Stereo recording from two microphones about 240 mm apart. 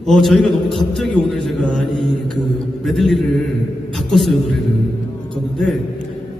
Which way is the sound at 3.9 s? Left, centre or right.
Centre.